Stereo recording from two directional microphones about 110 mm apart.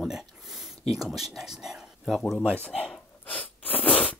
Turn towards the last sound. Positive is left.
turn(degrees=10)  # may be behind; listen again after turning